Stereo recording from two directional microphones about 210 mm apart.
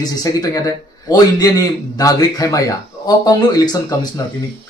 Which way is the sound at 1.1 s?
20° left (ahead or behind).